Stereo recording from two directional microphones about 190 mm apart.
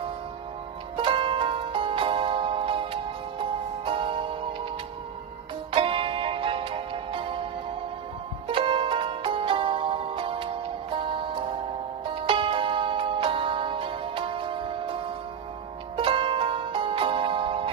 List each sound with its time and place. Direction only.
0.9 s music: 25° right (ahead or behind)
5.7 s music: 30° right (ahead or behind)
8.5 s music: 25° right (ahead or behind)